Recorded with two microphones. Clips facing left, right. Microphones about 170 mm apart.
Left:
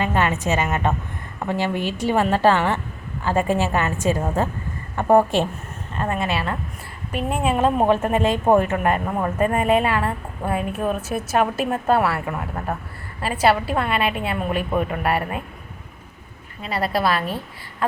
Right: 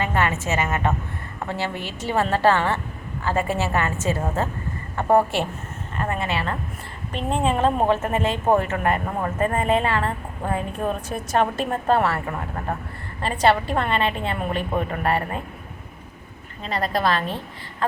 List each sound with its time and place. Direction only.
0.0 s a woman's voice: 15° left (ahead or behind)
13.2 s a woman's voice: 5° left (ahead or behind)
16.6 s a woman's voice: 10° left (ahead or behind)